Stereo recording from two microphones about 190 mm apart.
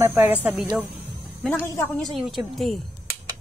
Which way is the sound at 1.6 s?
10° left (ahead or behind).